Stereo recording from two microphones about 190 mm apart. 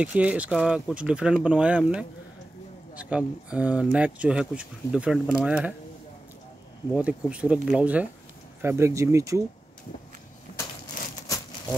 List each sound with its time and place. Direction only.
0.0 s speech: 5° right (ahead or behind)
6.9 s speech: 5° right (ahead or behind)
11.0 s a sound: 45° left (ahead or behind)